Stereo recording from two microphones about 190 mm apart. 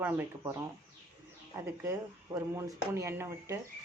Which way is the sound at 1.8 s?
15° right (ahead or behind).